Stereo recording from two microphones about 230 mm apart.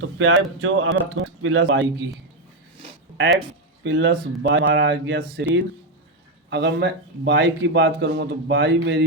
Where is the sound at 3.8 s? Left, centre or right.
Right.